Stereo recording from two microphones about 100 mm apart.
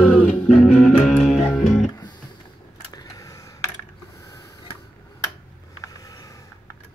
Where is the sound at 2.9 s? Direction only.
35° left (ahead or behind).